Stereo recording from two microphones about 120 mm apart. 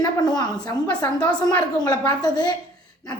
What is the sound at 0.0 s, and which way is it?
A woman's voice, 35° left (ahead or behind).